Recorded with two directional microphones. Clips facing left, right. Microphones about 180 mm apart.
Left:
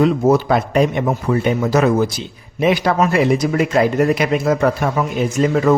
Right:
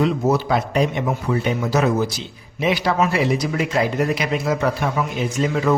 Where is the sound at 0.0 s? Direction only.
50° left (ahead or behind).